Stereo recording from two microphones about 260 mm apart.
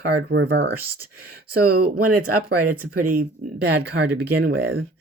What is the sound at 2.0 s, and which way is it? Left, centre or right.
Speech, right.